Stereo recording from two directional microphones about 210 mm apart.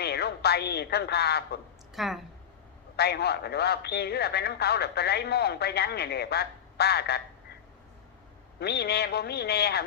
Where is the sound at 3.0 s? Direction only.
50° left (ahead or behind).